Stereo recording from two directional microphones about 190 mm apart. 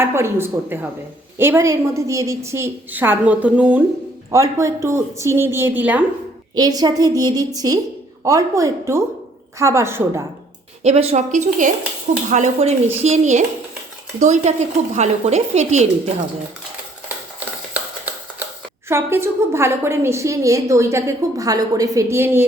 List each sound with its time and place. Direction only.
0.0 s a woman's voice: 15° right (ahead or behind)
6.6 s a woman's voice: 20° right (ahead or behind)
10.8 s a woman's voice: 35° right (ahead or behind)
18.9 s a woman's voice: 15° right (ahead or behind)